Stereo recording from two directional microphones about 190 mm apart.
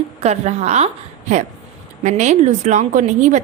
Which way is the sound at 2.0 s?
40° right (ahead or behind).